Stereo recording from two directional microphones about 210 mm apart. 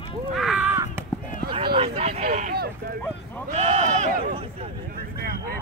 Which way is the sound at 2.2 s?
40° right (ahead or behind).